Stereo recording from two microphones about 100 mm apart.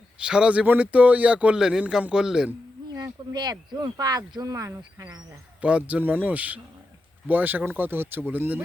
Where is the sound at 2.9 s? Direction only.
45° right (ahead or behind).